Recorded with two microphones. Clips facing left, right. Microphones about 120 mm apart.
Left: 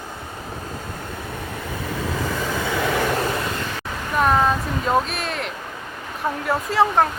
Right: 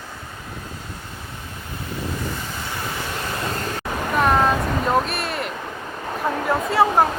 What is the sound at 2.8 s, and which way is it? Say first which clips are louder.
Vehicle: left 10 dB; 90° left.